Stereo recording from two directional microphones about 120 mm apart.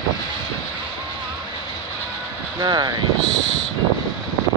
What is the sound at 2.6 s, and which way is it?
Speech, 35° right (ahead or behind).